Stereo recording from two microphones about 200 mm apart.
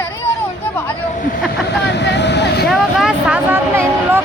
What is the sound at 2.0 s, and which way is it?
Vehicle, 60° left (ahead or behind).